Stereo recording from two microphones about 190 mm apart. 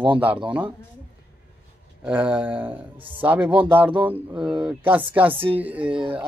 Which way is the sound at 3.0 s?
25° right (ahead or behind).